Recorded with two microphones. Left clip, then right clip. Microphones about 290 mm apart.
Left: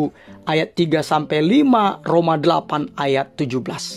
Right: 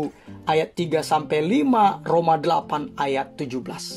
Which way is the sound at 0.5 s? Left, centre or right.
Left.